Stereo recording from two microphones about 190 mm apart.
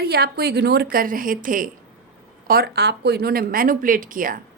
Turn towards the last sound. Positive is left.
turn(degrees=-45)  # may be behind; listen again after turning